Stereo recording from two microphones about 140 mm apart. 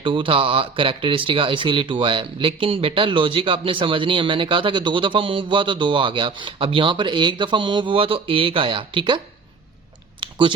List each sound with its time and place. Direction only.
0.0 s speech: 40° right (ahead or behind)
10.2 s typing: 35° right (ahead or behind)